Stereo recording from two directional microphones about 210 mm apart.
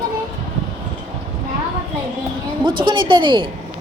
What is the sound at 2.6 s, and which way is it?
Speech, 25° right (ahead or behind).